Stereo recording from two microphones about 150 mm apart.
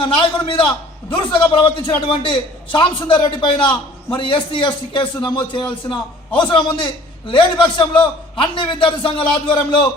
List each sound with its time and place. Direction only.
0.0 s a man's voice: 35° left (ahead or behind)